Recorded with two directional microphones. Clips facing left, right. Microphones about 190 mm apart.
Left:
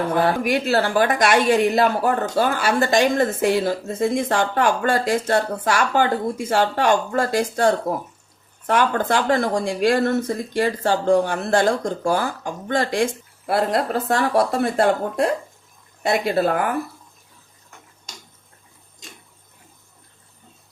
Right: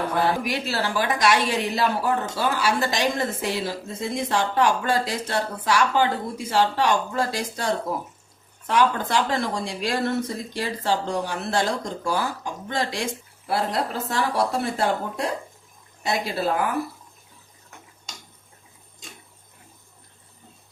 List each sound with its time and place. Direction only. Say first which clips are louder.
0.4 s speech: left 7 dB; 55° left (ahead or behind)